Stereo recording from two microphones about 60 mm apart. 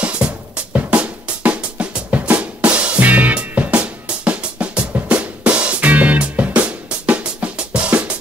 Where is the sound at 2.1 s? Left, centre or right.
Right.